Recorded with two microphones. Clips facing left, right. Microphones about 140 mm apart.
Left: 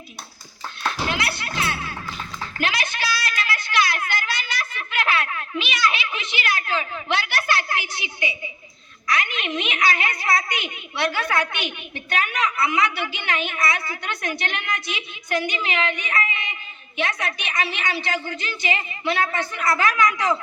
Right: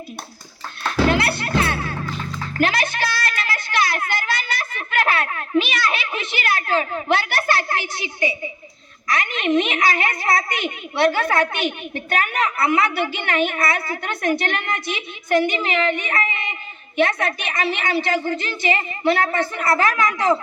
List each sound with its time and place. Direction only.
1.0 s music: 55° right (ahead or behind)
3.3 s a sound: 45° right (ahead or behind)
9.0 s a woman's voice: 45° right (ahead or behind)
19.3 s a woman's voice: 30° right (ahead or behind)
19.7 s a woman's voice: 45° right (ahead or behind)
20.0 s a woman's voice: 30° right (ahead or behind)